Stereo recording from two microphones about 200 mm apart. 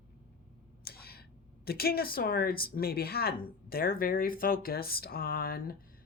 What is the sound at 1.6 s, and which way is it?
Speech, 50° left (ahead or behind).